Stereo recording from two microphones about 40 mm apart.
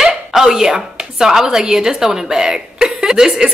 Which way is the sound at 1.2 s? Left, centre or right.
Centre.